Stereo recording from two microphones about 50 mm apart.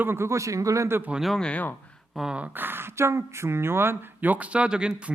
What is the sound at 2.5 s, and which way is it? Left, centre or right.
Speech, right.